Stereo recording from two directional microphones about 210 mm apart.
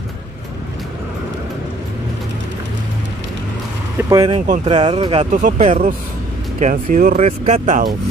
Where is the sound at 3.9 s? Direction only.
15° right (ahead or behind).